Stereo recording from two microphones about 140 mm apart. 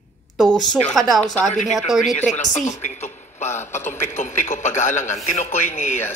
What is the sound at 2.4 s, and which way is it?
A woman's voice, 60° left (ahead or behind).